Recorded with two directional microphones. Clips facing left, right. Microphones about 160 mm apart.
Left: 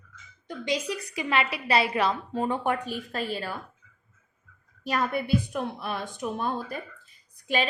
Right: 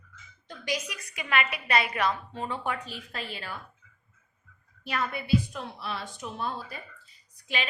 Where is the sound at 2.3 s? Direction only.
45° left (ahead or behind).